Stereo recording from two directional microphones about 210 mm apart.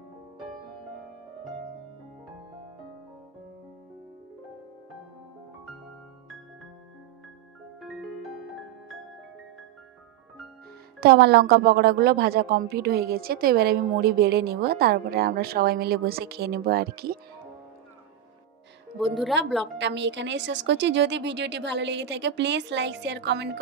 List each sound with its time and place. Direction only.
7.8 s music: centre (ahead or behind)
11.0 s a woman's voice: 50° right (ahead or behind)
19.6 s a woman's voice: 60° right (ahead or behind)